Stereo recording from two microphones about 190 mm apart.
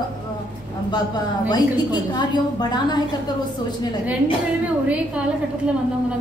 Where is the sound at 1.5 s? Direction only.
20° left (ahead or behind).